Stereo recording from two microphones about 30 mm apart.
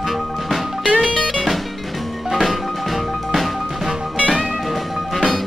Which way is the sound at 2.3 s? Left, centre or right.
Centre.